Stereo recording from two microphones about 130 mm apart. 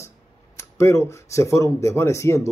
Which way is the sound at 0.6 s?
20° left (ahead or behind).